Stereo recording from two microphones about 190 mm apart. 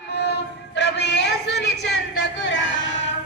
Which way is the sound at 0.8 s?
65° left (ahead or behind).